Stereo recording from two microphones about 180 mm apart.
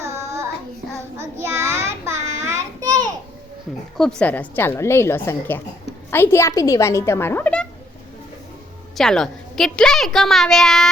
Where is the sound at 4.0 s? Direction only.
5° left (ahead or behind).